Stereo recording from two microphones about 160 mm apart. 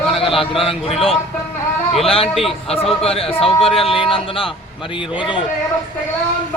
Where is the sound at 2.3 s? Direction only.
Centre (ahead or behind).